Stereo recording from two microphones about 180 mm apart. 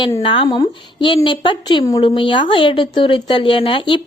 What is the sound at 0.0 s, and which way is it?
A woman's voice, 30° left (ahead or behind).